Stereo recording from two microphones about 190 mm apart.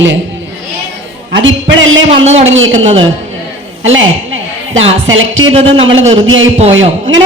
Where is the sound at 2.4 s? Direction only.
90° right.